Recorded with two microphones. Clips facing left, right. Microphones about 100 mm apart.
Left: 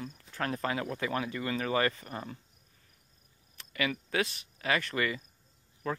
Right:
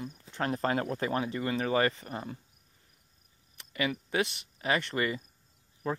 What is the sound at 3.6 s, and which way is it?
Speech, 20° right (ahead or behind).